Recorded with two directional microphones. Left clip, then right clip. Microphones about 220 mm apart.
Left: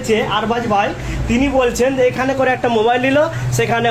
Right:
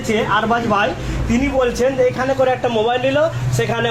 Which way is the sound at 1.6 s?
30° left (ahead or behind).